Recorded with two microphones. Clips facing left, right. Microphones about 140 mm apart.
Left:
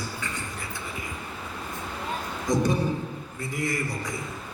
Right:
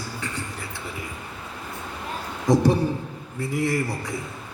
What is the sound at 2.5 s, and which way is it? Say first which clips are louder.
Speech: right 5 dB; 65° right (ahead or behind).